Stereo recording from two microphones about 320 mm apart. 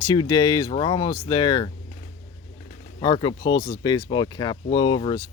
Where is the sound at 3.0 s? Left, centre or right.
Centre.